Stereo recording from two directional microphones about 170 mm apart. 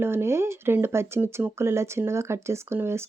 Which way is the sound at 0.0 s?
15° right (ahead or behind).